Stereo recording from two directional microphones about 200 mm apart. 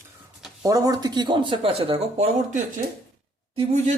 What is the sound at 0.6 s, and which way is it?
Speech, 15° right (ahead or behind).